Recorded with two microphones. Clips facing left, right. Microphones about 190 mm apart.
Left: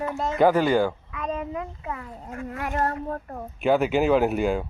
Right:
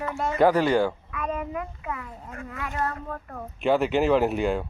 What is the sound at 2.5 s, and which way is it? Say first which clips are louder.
Speech: left 4 dB; 50° left (ahead or behind).